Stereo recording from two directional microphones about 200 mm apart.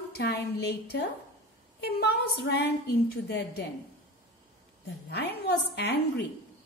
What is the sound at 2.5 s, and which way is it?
A woman's voice, 55° left (ahead or behind).